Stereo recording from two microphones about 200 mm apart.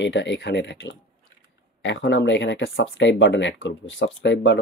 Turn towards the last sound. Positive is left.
turn(degrees=65)  # may be behind; listen again after turning